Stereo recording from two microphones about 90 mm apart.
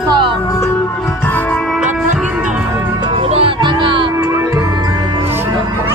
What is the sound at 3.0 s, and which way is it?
Music, 90° right.